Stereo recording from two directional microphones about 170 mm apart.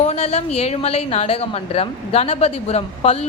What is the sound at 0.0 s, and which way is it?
A woman's voice, 40° left (ahead or behind).